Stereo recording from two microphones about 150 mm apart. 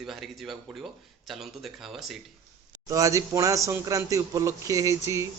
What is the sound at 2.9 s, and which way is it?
Speech, 20° right (ahead or behind).